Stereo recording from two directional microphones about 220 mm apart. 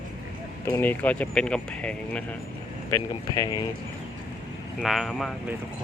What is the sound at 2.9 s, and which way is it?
Speech, 15° left (ahead or behind).